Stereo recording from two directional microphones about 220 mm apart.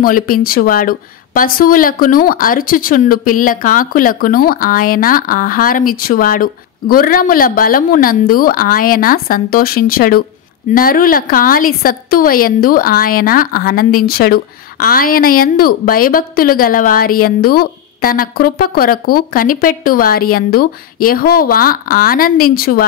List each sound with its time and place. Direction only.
0.0 s a woman's voice: 40° left (ahead or behind)